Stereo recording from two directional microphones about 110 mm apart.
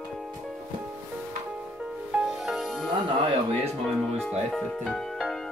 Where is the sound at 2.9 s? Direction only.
40° right (ahead or behind).